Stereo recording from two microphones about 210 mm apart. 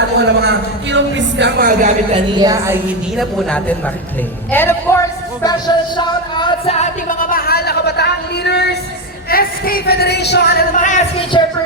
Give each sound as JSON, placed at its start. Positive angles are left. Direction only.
{"t": 0.3, "sound": "a sound", "side_deg": -55}
{"t": 2.4, "sound": "a woman's voice", "side_deg": -15}
{"t": 3.2, "sound": "speech", "side_deg": 5}
{"t": 4.5, "sound": "a sound", "side_deg": 10}
{"t": 5.4, "sound": "music", "side_deg": 20}
{"t": 9.3, "sound": "speech", "side_deg": 45}